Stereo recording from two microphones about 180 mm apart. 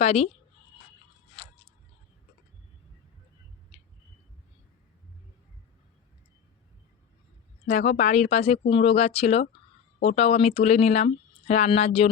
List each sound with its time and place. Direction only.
0.0 s speech: 35° left (ahead or behind)
7.7 s speech: 40° left (ahead or behind)